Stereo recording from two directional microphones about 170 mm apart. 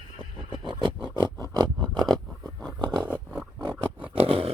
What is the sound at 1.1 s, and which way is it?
Music, 25° right (ahead or behind).